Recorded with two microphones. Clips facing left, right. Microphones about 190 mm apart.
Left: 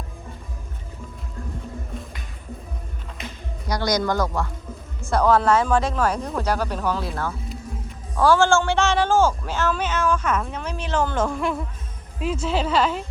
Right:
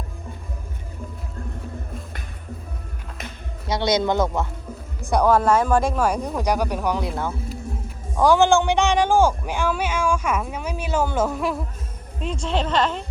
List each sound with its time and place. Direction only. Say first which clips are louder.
3.7 s speech: right 2 dB; 25° right (ahead or behind)
7.4 s music: right 2 dB; centre (ahead or behind)
8.1 s speech: right 1 dB; 15° right (ahead or behind); by 13.0 s 10° left (ahead or behind)